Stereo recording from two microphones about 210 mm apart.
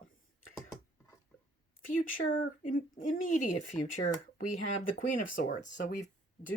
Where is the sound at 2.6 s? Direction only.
40° left (ahead or behind).